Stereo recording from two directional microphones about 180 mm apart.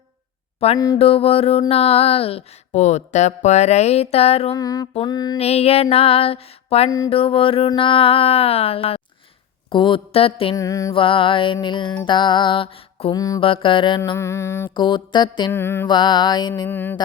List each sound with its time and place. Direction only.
0.6 s a sound: 35° left (ahead or behind)
4.5 s mantra: 20° left (ahead or behind)
5.4 s a sound: 35° left (ahead or behind)
9.6 s mantra: 25° left (ahead or behind)
10.5 s mantra: 20° left (ahead or behind)
11.0 s mantra: 30° left (ahead or behind)
14.0 s music: 15° left (ahead or behind)
14.8 s mantra: 25° left (ahead or behind)
15.5 s music: 15° left (ahead or behind)
15.9 s mantra: 25° left (ahead or behind)
16.6 s music: 10° left (ahead or behind)